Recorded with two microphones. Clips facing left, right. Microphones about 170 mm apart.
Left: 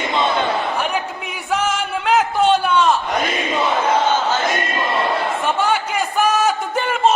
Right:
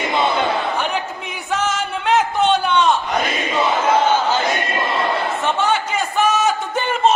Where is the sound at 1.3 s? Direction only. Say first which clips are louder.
Left 1 dB; 10° left (ahead or behind).